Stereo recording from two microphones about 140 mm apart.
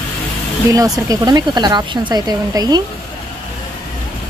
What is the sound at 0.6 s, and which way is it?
Speech, 25° right (ahead or behind).